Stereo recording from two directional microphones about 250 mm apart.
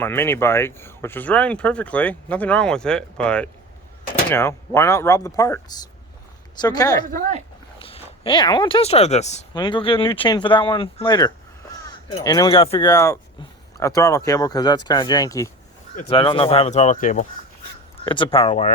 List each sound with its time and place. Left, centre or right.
0.0 s speech: centre
7.1 s speech: right
7.8 s speech: left
18.0 s speech: centre